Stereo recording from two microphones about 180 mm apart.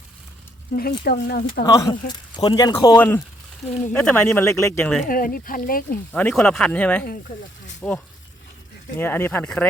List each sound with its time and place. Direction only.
0.7 s speech: 55° left (ahead or behind)
1.6 s speech: 20° left (ahead or behind)
3.0 s speech: 10° left (ahead or behind)
5.0 s speech: 50° left (ahead or behind)
6.1 s speech: 5° left (ahead or behind)